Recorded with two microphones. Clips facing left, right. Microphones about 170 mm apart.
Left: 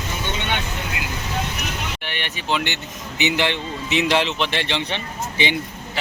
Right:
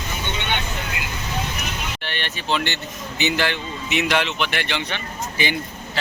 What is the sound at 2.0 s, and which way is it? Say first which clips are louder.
Speech: even; 15° left (ahead or behind).